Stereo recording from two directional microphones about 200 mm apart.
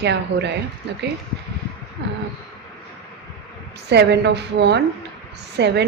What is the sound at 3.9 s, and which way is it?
A woman's voice, 60° right (ahead or behind).